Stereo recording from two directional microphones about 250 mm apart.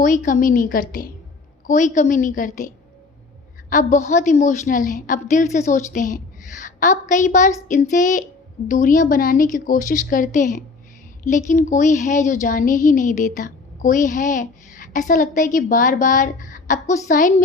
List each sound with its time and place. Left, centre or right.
0.0 s a woman's voice: left